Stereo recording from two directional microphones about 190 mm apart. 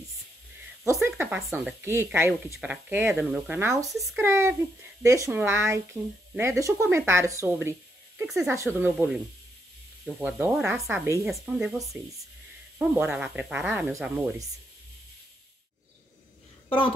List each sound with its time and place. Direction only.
1.0 s speech: 10° right (ahead or behind)
8.2 s speech: centre (ahead or behind)
8.5 s speech: 10° right (ahead or behind)
16.6 s a woman's voice: 25° left (ahead or behind)